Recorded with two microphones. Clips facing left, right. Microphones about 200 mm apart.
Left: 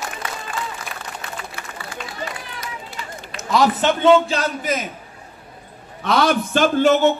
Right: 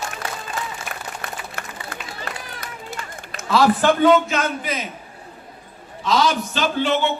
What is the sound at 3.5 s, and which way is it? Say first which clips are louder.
A man's voice: right 1 dB; 20° left (ahead or behind).